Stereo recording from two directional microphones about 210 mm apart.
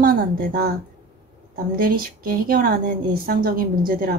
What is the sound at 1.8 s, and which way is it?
Speech, 45° right (ahead or behind).